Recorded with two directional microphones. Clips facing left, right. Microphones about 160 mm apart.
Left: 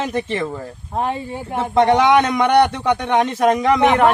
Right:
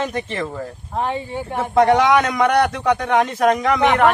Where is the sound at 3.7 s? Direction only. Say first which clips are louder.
Left 2 dB; 25° left (ahead or behind).